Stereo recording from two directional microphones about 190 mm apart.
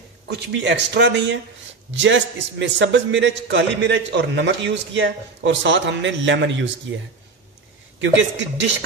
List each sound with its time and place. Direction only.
0.3 s a man's voice: 65° right (ahead or behind)
8.0 s a man's voice: 75° right (ahead or behind)